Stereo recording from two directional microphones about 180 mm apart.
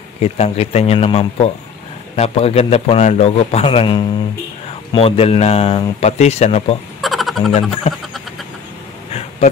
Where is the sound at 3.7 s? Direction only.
25° left (ahead or behind).